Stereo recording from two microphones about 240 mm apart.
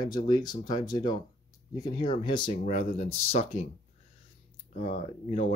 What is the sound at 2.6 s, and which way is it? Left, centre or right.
Speech, left.